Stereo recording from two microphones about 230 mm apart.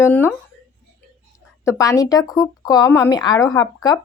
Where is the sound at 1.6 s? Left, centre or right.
Centre.